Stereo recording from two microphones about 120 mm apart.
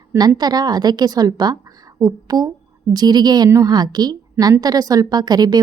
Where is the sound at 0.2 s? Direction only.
35° right (ahead or behind).